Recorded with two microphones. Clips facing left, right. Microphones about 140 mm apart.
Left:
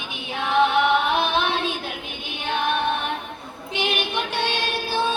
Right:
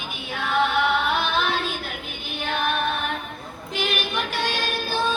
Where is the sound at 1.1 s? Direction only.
25° left (ahead or behind).